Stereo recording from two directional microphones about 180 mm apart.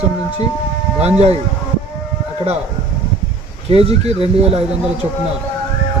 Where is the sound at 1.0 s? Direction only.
35° right (ahead or behind).